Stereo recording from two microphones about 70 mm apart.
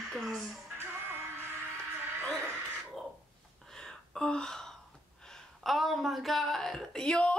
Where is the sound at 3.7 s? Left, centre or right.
Centre.